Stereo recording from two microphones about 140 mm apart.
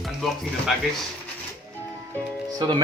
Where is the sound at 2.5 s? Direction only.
35° right (ahead or behind).